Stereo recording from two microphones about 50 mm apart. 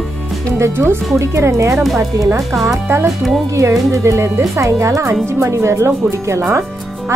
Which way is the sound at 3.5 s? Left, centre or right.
Right.